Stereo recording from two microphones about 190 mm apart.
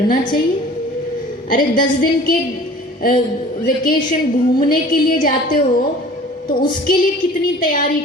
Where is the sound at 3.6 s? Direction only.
50° left (ahead or behind).